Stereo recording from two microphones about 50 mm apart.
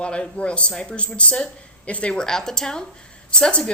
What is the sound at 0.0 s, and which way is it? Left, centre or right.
Speech, left.